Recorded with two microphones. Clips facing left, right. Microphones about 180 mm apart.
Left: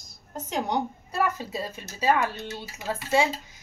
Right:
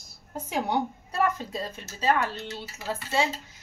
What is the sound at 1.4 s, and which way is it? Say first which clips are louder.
Speech: left 1 dB; 10° left (ahead or behind).